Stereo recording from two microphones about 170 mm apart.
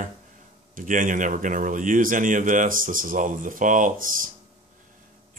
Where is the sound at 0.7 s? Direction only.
50° right (ahead or behind).